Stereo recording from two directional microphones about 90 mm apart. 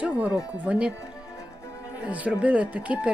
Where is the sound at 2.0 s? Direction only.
15° right (ahead or behind).